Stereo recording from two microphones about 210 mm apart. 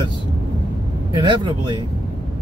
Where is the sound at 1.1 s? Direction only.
20° right (ahead or behind).